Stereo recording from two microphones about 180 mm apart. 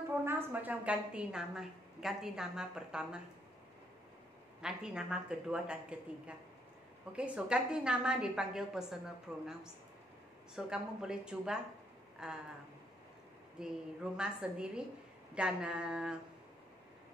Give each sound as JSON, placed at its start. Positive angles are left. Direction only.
{"t": 0.1, "sound": "a woman's voice", "side_deg": -10}
{"t": 4.6, "sound": "a woman's voice", "side_deg": -5}
{"t": 13.6, "sound": "a woman's voice", "side_deg": -5}